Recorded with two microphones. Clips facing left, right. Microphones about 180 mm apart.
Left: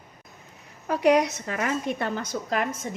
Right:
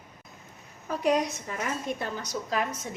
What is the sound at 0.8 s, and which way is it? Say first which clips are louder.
A woman's voice: left 5 dB; 75° left (ahead or behind).